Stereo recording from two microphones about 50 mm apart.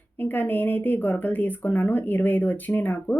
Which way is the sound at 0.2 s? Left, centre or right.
Left.